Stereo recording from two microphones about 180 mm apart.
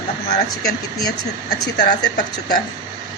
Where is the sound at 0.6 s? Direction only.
20° left (ahead or behind).